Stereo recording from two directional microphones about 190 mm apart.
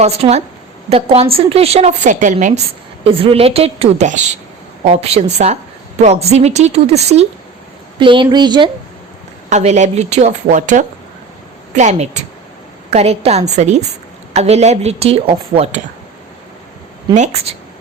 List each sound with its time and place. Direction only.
0.0 s a woman's voice: 35° right (ahead or behind)
3.0 s a woman's voice: 30° right (ahead or behind)
9.5 s a woman's voice: 35° right (ahead or behind)
17.2 s a woman's voice: 35° right (ahead or behind)